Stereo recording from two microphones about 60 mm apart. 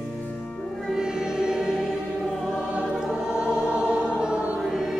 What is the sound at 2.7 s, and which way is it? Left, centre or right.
Choir, centre.